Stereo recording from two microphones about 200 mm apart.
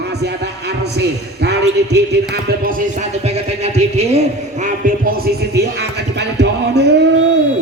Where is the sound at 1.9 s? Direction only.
55° right (ahead or behind); by 4.2 s 30° right (ahead or behind).